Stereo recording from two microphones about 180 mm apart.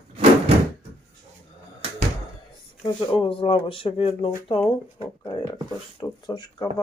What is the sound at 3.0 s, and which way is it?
Speech, 30° left (ahead or behind).